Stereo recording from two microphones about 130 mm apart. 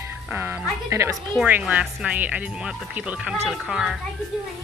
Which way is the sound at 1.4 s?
10° right (ahead or behind).